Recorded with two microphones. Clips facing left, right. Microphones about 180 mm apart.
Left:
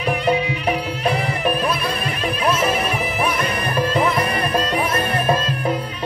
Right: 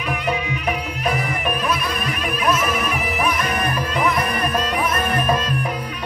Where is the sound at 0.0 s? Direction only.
35° left (ahead or behind).